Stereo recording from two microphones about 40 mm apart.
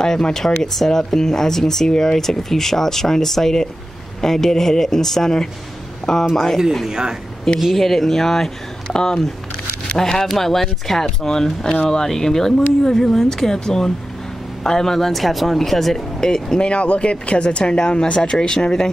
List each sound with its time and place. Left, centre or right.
0.0 s speech: centre
6.9 s speech: centre
7.7 s speech: centre
8.8 s speech: centre
16.6 s speech: left